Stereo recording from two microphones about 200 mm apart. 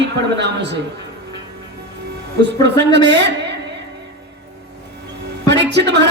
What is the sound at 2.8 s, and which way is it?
Speech, 60° right (ahead or behind).